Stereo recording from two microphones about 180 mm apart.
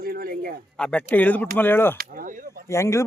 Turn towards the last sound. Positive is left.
turn(degrees=15)  # may be behind; listen again after turning